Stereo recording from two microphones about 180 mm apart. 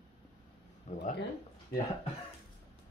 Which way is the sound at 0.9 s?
40° left (ahead or behind).